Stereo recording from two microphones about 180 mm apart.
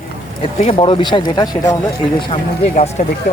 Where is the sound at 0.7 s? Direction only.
30° left (ahead or behind).